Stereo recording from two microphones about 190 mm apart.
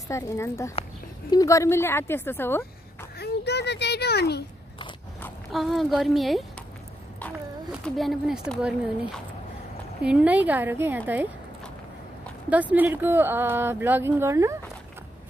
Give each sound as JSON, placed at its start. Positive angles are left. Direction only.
{"t": 0.1, "sound": "speech", "side_deg": 15}
{"t": 3.2, "sound": "a child's voice", "side_deg": 60}
{"t": 5.5, "sound": "speech", "side_deg": 0}
{"t": 7.7, "sound": "speech", "side_deg": 0}
{"t": 12.4, "sound": "speech", "side_deg": -10}